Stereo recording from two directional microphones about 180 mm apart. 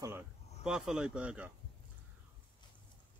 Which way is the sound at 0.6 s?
5° right (ahead or behind).